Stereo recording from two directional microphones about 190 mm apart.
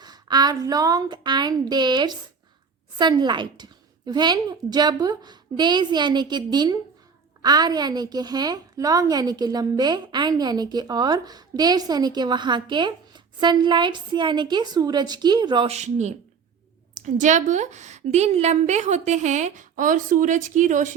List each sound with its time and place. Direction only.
0.0 s a woman's voice: 20° right (ahead or behind)
15.7 s a woman's voice: 40° right (ahead or behind)